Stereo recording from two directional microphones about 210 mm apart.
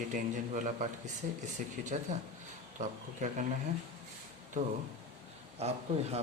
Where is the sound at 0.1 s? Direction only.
35° right (ahead or behind).